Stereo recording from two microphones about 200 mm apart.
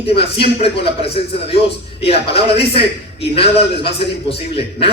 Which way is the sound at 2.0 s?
30° left (ahead or behind).